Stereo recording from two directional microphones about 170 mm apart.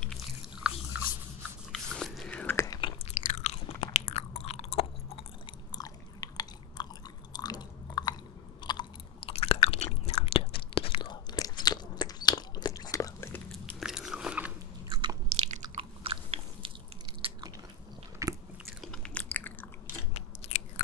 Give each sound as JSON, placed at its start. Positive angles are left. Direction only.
{"t": 0.0, "sound": "biting", "side_deg": 0}
{"t": 2.8, "sound": "chewing", "side_deg": 40}
{"t": 5.8, "sound": "biting", "side_deg": 20}
{"t": 7.3, "sound": "chewing", "side_deg": 25}
{"t": 13.7, "sound": "biting", "side_deg": -5}
{"t": 14.9, "sound": "biting", "side_deg": -25}
{"t": 15.2, "sound": "chewing", "side_deg": -40}
{"t": 15.7, "sound": "biting", "side_deg": -35}
{"t": 18.7, "sound": "chewing", "side_deg": 0}
{"t": 20.2, "sound": "biting", "side_deg": 40}